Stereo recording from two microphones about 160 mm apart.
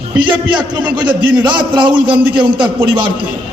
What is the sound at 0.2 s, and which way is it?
A man's voice, 30° right (ahead or behind).